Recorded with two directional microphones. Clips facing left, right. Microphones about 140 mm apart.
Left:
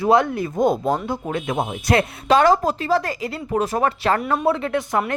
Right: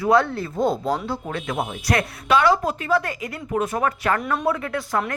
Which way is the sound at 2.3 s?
40° left (ahead or behind).